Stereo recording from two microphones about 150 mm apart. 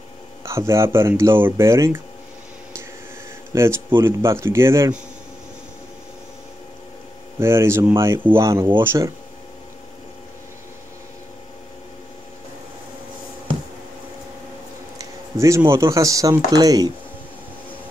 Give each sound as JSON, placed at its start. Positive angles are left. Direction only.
{"t": 0.5, "sound": "speech", "side_deg": -20}
{"t": 3.5, "sound": "speech", "side_deg": -20}
{"t": 7.3, "sound": "speech", "side_deg": -15}
{"t": 15.0, "sound": "speech", "side_deg": -20}